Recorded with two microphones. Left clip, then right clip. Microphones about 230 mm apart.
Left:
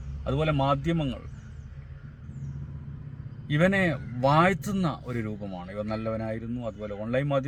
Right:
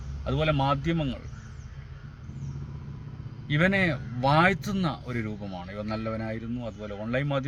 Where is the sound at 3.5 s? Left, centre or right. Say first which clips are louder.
Even; centre.